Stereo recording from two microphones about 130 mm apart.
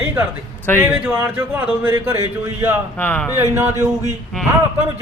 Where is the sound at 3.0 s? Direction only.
15° left (ahead or behind).